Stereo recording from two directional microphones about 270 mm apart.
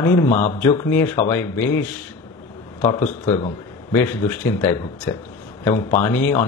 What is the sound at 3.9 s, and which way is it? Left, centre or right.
Speech, centre.